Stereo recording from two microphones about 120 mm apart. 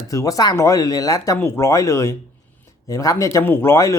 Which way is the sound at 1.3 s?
20° left (ahead or behind).